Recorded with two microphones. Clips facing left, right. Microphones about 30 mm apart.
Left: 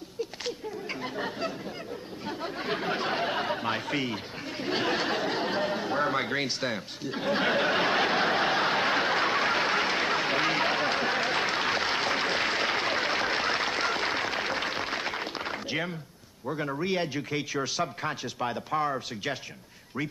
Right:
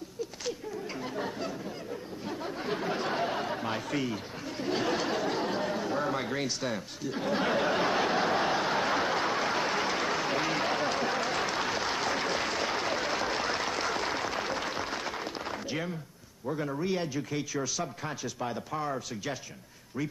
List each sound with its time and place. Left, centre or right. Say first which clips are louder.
1.0 s a sound: left 3 dB; left
2.2 s chatter: left 2 dB; left
16.4 s a man's voice: left 1 dB; left
16.8 s speech: left 4 dB; left